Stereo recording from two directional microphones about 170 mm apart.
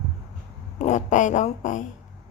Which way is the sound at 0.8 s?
45° left (ahead or behind).